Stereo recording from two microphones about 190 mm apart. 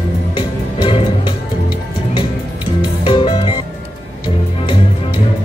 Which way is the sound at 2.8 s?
25° left (ahead or behind).